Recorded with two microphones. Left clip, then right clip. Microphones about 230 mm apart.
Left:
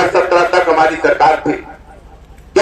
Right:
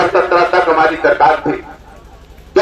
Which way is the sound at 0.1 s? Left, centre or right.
Left.